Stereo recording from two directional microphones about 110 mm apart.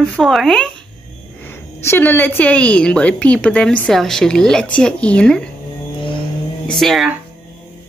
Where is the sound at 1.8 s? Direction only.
20° left (ahead or behind).